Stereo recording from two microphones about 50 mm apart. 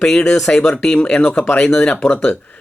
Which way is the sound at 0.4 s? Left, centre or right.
Centre.